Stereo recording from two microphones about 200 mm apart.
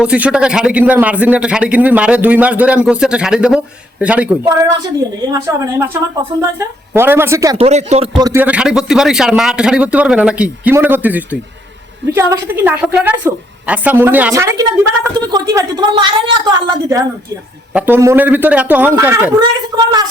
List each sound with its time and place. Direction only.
0.0 s a man's voice: 5° right (ahead or behind)
7.6 s speech: 35° right (ahead or behind)
8.2 s a woman's voice: 10° right (ahead or behind)